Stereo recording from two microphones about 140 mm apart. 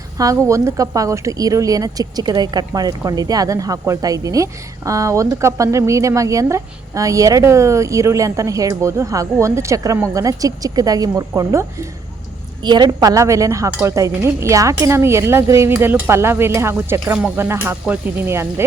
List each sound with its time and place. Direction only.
0.2 s speech: 20° right (ahead or behind)